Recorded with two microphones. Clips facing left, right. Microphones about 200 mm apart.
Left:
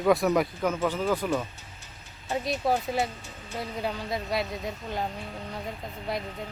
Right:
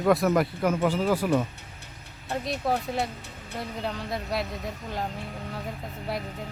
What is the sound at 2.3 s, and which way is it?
Speech, centre (ahead or behind).